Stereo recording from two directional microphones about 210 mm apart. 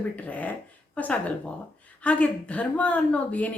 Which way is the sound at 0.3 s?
5° left (ahead or behind).